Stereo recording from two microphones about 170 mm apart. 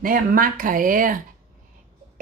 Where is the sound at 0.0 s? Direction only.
55° right (ahead or behind).